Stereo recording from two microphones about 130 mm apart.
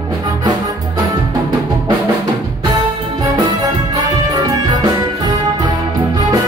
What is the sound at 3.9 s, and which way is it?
Music, 30° right (ahead or behind).